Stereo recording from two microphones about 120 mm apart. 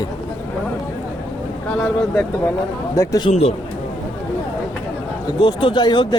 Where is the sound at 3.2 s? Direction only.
60° left (ahead or behind).